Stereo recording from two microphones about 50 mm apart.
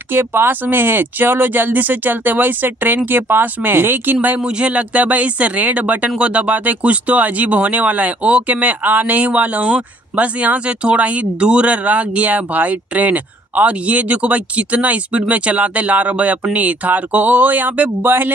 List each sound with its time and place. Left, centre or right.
0.1 s speech: right
4.5 s speech: right